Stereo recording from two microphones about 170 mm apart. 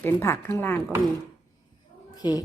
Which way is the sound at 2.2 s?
20° left (ahead or behind).